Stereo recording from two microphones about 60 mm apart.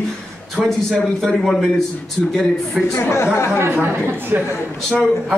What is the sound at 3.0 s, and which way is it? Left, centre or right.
Speech, left.